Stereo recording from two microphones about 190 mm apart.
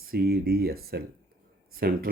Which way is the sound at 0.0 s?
50° right (ahead or behind).